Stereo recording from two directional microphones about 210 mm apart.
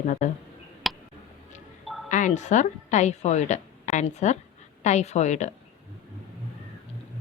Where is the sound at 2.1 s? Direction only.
35° left (ahead or behind).